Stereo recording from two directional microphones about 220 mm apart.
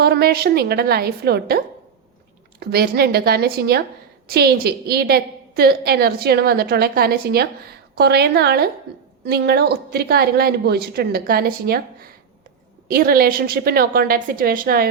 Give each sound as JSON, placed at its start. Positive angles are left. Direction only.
{"t": 0.0, "sound": "a woman's voice", "side_deg": -45}